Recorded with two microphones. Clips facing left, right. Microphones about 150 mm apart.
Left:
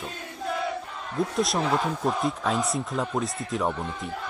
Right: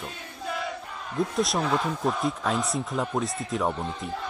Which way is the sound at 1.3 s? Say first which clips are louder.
Left 1 dB; centre (ahead or behind).